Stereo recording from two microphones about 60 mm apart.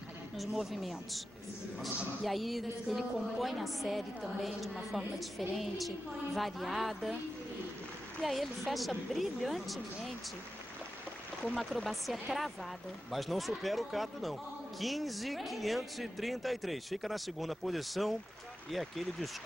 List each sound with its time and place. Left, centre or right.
0.4 s a man's voice: centre
2.2 s a man's voice: centre
8.2 s a man's voice: centre
11.4 s a man's voice: centre